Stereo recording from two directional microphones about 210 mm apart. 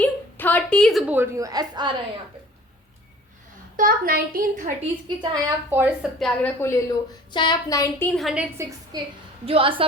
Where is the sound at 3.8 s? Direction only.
45° right (ahead or behind).